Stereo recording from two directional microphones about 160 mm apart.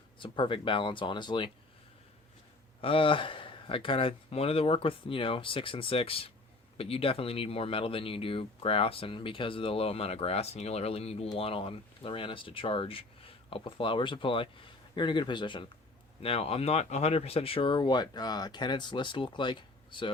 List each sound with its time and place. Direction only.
0.2 s speech: 30° left (ahead or behind)
2.8 s speech: 35° left (ahead or behind)